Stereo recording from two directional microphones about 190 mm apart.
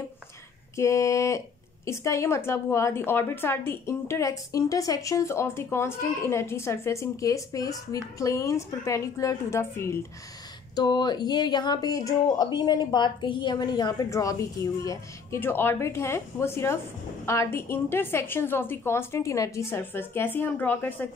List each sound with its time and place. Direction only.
0.7 s a woman's voice: 15° left (ahead or behind)